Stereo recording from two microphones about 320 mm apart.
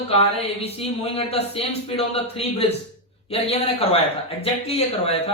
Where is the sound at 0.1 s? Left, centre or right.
Centre.